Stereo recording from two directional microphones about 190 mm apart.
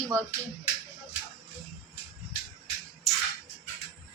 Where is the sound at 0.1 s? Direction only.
5° left (ahead or behind).